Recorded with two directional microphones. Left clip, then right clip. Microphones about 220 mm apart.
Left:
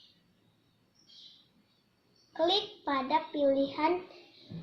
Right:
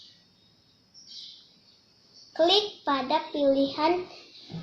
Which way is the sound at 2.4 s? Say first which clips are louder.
Right 7 dB; 20° right (ahead or behind).